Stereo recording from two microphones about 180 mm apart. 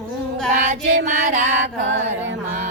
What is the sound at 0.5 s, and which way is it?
Music, 45° right (ahead or behind).